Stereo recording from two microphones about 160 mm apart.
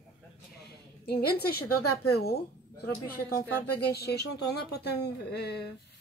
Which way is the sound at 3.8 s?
90° left.